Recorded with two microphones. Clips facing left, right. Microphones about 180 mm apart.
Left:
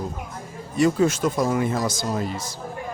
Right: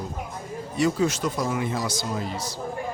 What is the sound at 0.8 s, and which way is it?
Speech, 50° left (ahead or behind).